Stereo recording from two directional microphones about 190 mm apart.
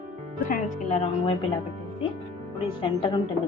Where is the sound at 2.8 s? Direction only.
25° left (ahead or behind).